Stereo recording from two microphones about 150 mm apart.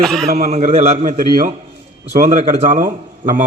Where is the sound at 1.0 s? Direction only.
65° right (ahead or behind).